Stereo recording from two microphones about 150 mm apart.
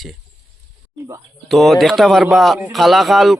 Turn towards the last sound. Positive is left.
turn(degrees=0)  # may be behind; listen again after turning